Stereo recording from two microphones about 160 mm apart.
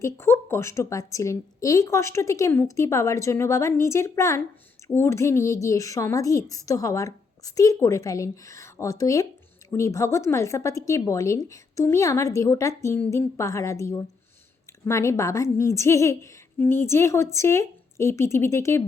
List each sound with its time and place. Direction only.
0.0 s a woman's voice: 15° left (ahead or behind)